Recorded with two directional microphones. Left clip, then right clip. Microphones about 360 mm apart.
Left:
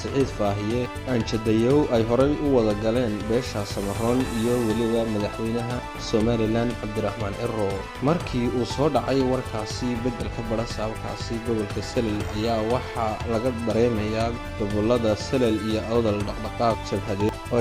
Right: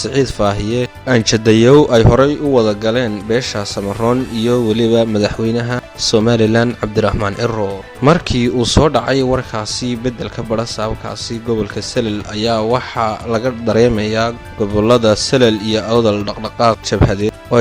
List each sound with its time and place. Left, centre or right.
0.0 s speech: right
11.9 s speech: right